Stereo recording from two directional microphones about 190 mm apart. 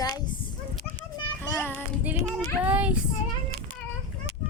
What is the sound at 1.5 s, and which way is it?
Child singing, 10° left (ahead or behind).